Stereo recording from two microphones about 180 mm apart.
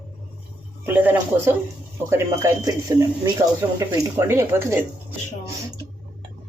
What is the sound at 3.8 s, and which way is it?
Speech, 20° right (ahead or behind).